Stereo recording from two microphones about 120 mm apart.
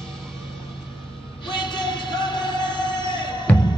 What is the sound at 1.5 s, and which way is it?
Music, 40° left (ahead or behind).